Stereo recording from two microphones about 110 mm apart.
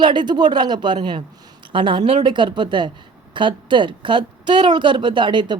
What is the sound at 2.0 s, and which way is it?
Speech, 85° right.